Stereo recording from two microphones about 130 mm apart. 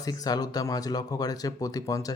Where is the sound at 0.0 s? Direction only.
30° left (ahead or behind).